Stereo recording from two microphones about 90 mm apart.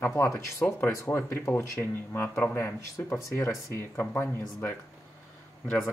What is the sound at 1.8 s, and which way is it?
Speech, 25° left (ahead or behind).